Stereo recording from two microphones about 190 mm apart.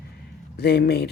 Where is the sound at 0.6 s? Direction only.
55° left (ahead or behind).